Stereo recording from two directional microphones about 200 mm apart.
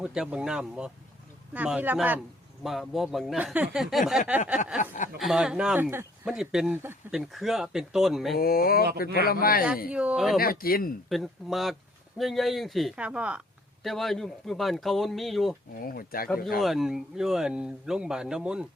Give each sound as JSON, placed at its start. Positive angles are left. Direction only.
{"t": 0.0, "sound": "speech", "side_deg": -5}
{"t": 5.1, "sound": "speech", "side_deg": -5}
{"t": 8.4, "sound": "a man's voice", "side_deg": 50}
{"t": 9.9, "sound": "speech", "side_deg": -5}
{"t": 10.4, "sound": "a man's voice", "side_deg": 45}
{"t": 11.1, "sound": "speech", "side_deg": 0}
{"t": 15.8, "sound": "a man's voice", "side_deg": 45}
{"t": 16.6, "sound": "speech", "side_deg": 0}